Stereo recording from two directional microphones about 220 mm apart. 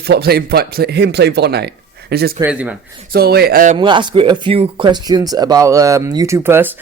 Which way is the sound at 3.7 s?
20° right (ahead or behind).